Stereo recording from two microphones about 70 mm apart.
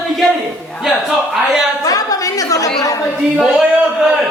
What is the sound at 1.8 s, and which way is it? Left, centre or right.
Speech, left.